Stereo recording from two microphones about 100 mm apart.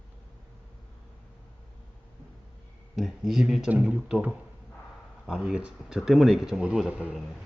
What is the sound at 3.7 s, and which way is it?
Speech, 15° right (ahead or behind).